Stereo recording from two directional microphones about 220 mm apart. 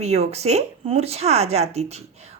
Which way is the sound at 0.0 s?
30° right (ahead or behind).